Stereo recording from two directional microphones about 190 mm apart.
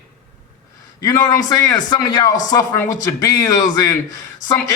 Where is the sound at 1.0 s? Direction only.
20° left (ahead or behind).